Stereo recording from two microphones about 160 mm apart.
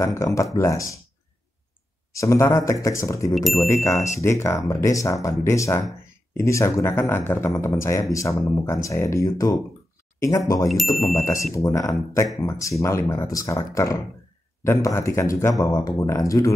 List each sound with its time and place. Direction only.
0.0 s speech: 20° left (ahead or behind)
2.1 s speech: 20° left (ahead or behind)
3.9 s speech: 45° left (ahead or behind)
4.2 s speech: 15° left (ahead or behind)